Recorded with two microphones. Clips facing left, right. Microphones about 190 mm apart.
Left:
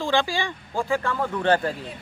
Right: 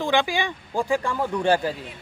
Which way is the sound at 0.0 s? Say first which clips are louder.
Right 1 dB; 15° right (ahead or behind).